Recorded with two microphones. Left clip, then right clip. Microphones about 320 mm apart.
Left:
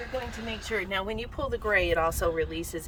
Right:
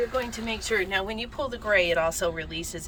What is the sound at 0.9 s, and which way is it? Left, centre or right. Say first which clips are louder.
Speech: right 3 dB; centre.